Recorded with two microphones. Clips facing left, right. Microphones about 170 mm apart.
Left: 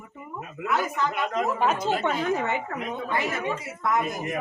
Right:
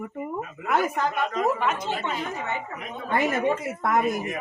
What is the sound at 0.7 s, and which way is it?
Speech, 50° right (ahead or behind).